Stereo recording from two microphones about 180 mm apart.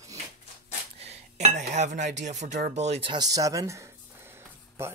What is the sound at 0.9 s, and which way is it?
Speech, 35° right (ahead or behind).